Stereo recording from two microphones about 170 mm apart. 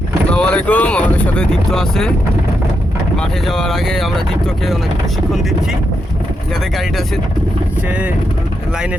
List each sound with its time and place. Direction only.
0.3 s speech: 5° left (ahead or behind)
3.2 s speech: 5° left (ahead or behind)
7.9 s speech: 5° right (ahead or behind)